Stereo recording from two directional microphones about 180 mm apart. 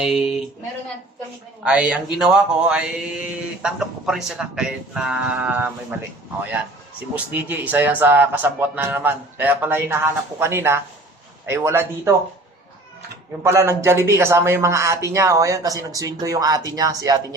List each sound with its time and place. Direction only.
0.0 s speech: 5° right (ahead or behind)
1.6 s speech: 5° right (ahead or behind)
7.4 s speech: 10° right (ahead or behind)
13.4 s speech: 15° right (ahead or behind)